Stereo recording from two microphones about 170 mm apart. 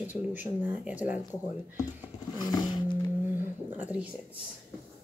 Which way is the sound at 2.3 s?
20° left (ahead or behind).